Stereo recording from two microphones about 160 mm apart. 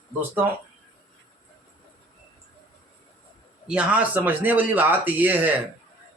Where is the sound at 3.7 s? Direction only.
5° right (ahead or behind).